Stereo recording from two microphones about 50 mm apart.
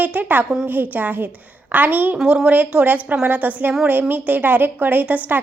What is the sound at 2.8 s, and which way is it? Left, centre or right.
A woman's voice, right.